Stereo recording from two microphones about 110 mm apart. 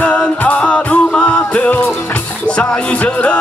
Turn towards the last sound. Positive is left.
turn(degrees=10)  # may be behind; listen again after turning